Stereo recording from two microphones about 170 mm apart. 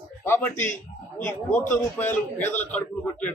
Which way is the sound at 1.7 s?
10° left (ahead or behind).